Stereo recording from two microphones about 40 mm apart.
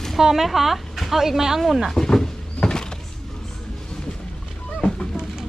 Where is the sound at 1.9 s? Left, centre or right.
Centre.